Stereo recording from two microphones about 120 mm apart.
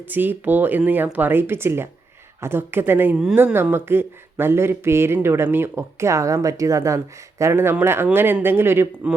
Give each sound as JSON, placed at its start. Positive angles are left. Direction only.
{"t": 0.1, "sound": "speech", "side_deg": -15}